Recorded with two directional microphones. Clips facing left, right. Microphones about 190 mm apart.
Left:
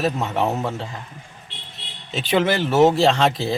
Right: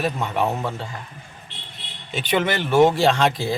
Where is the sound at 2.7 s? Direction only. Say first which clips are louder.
Even; centre (ahead or behind).